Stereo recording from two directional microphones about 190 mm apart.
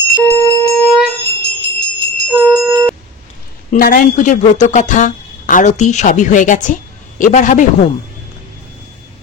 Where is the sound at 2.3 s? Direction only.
10° right (ahead or behind).